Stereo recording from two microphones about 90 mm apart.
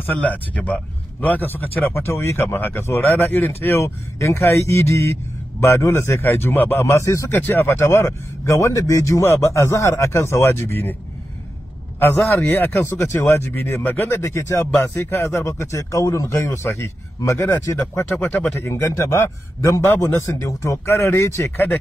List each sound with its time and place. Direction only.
0.0 s speech: 20° left (ahead or behind); by 7.3 s 35° left (ahead or behind)
7.3 s speech: 25° left (ahead or behind)
12.3 s speech: 20° left (ahead or behind)